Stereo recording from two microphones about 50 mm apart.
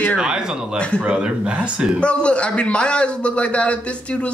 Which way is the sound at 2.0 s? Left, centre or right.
Left.